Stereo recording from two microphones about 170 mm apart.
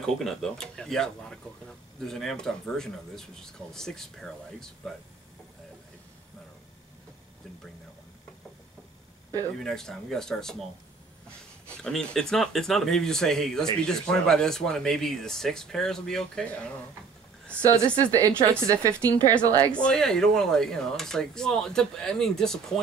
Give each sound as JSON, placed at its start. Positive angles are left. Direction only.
{"t": 0.0, "sound": "speech", "side_deg": 0}
{"t": 9.6, "sound": "speech", "side_deg": 5}
{"t": 11.7, "sound": "speech", "side_deg": 5}
{"t": 17.7, "sound": "a woman's voice", "side_deg": -15}
{"t": 19.7, "sound": "speech", "side_deg": 5}